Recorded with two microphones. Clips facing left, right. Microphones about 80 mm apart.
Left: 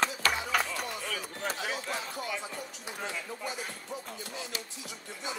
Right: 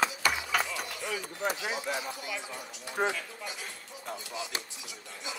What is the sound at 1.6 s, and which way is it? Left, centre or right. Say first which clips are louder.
Speech: right 2 dB; centre.